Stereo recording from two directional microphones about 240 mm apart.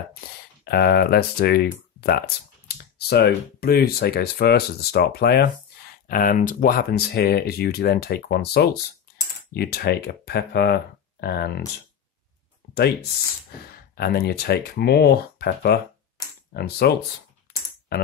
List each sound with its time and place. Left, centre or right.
0.7 s speech: left
13.5 s speech: left
17.5 s typing: left